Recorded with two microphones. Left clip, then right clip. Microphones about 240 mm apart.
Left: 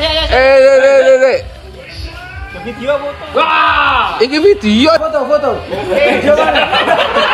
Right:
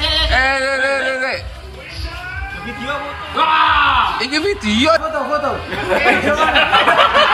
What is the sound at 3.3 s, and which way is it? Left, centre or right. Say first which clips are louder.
Speech: left 3 dB; left.